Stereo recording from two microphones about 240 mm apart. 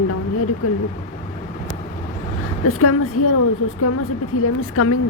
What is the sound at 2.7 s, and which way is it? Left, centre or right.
Speech, left.